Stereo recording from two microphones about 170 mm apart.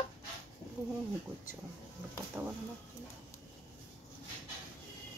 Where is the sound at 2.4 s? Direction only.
15° right (ahead or behind).